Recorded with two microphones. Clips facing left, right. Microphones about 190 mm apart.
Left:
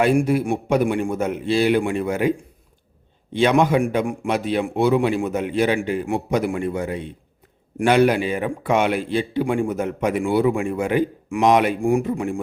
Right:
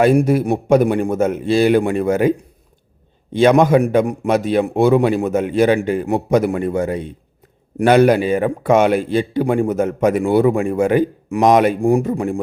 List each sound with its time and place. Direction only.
0.0 s speech: 40° right (ahead or behind)
3.3 s speech: 45° right (ahead or behind)